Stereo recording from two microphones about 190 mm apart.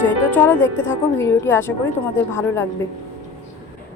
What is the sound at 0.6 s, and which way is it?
Speech, 80° left.